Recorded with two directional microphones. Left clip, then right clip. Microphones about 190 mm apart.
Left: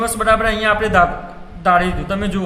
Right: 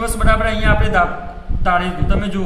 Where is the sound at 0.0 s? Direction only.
25° left (ahead or behind).